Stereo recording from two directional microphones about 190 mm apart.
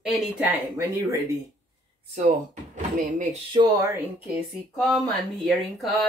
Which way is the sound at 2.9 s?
40° right (ahead or behind).